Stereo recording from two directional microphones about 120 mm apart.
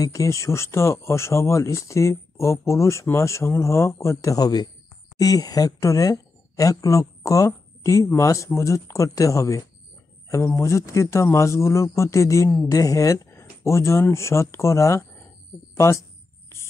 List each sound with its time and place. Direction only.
0.0 s speech: 25° left (ahead or behind)